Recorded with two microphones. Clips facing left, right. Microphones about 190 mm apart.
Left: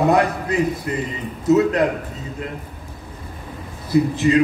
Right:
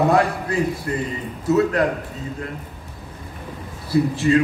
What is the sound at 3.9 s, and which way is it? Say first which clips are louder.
Speech: left 1 dB; 20° left (ahead or behind).